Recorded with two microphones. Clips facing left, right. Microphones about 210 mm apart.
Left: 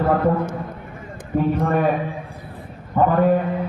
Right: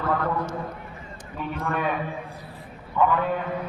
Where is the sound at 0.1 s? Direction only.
50° left (ahead or behind).